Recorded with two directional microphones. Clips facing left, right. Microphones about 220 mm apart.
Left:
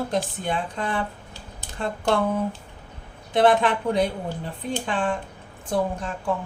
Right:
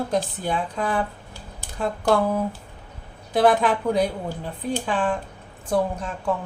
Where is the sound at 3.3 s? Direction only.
5° right (ahead or behind).